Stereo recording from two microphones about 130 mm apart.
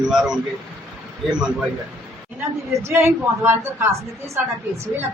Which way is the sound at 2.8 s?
20° right (ahead or behind).